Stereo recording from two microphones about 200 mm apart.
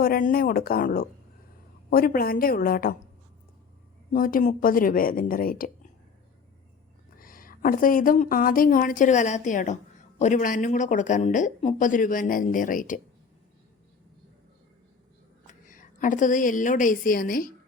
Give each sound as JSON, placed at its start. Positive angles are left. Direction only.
{"t": 0.0, "sound": "a woman's voice", "side_deg": 45}
{"t": 4.1, "sound": "a woman's voice", "side_deg": 45}
{"t": 7.2, "sound": "a woman's voice", "side_deg": 45}
{"t": 15.6, "sound": "a woman's voice", "side_deg": 40}